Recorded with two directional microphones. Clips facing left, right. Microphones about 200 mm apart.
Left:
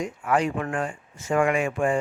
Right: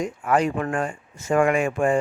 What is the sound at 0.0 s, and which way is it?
A man's voice, 40° right (ahead or behind).